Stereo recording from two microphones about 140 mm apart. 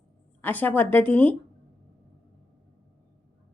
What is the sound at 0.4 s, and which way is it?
Speech, 15° left (ahead or behind).